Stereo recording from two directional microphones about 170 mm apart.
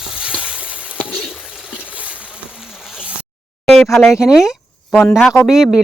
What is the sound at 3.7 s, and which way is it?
Speech, centre (ahead or behind).